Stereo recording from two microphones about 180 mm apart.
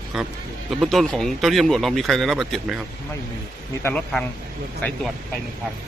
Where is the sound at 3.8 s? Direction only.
10° left (ahead or behind).